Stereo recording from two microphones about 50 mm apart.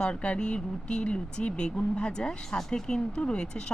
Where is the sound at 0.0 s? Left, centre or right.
Left.